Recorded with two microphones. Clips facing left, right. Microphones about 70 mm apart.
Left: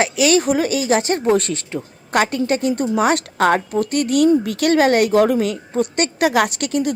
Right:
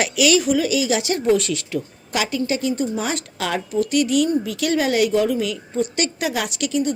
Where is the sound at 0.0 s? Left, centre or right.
Left.